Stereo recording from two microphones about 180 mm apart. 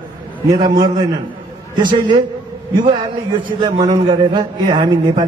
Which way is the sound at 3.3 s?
25° right (ahead or behind).